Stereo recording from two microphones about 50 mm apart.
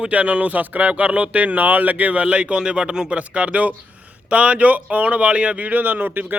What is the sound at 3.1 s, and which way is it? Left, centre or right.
Speech, right.